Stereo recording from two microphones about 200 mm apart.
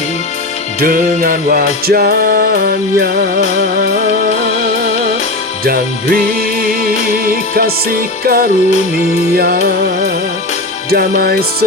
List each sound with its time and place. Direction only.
0.8 s music: 45° right (ahead or behind)
5.6 s music: 50° right (ahead or behind)
8.2 s music: 50° right (ahead or behind)
10.9 s music: 50° right (ahead or behind)